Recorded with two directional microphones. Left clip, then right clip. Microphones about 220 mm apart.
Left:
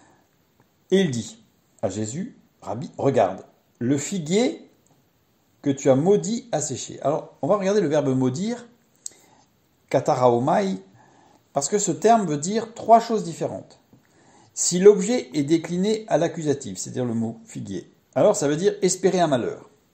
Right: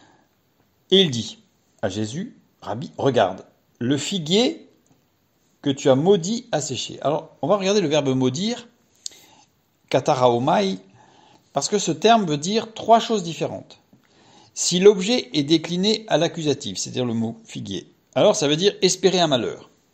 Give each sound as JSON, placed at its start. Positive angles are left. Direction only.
{"t": 1.1, "sound": "speech", "side_deg": -25}
{"t": 5.6, "sound": "speech", "side_deg": -25}
{"t": 14.2, "sound": "a sound", "side_deg": -25}
{"t": 14.9, "sound": "speech", "side_deg": -25}